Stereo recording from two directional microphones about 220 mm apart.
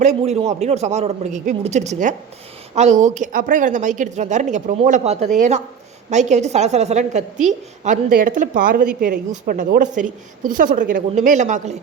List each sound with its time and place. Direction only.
0.0 s speech: 30° right (ahead or behind)